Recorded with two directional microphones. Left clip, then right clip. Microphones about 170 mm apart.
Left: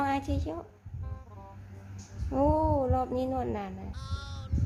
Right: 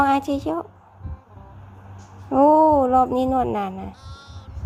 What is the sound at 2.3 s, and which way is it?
Speech, 30° right (ahead or behind).